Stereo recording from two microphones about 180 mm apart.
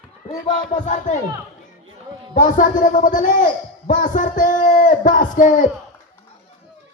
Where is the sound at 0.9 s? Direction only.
45° left (ahead or behind).